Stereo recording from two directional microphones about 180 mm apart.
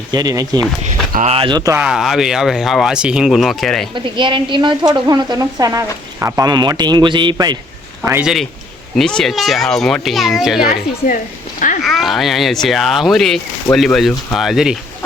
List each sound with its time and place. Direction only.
0.1 s speech: 20° right (ahead or behind)
1.1 s speech: 35° right (ahead or behind); by 1.8 s 20° right (ahead or behind)
1.8 s speech: 5° right (ahead or behind)
3.9 s speech: 25° right (ahead or behind)
8.0 s speech: 10° right (ahead or behind)
9.0 s speech: centre (ahead or behind)
10.7 s speech: 50° left (ahead or behind)
11.8 s speech: centre (ahead or behind)